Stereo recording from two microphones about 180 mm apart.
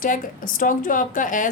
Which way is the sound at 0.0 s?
50° left (ahead or behind).